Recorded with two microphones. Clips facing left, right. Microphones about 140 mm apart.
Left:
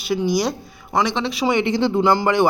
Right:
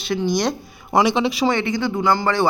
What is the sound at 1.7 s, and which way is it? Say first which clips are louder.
Speech: left 3 dB; 25° left (ahead or behind).